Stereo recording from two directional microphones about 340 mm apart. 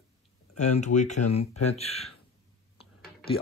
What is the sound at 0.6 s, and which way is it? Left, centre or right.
Speech, centre.